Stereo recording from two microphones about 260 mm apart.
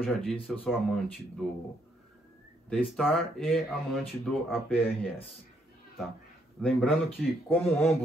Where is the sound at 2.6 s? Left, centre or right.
Centre.